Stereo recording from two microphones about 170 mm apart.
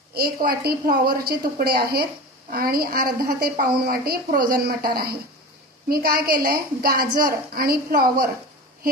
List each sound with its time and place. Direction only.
0.1 s a woman's voice: 60° right (ahead or behind)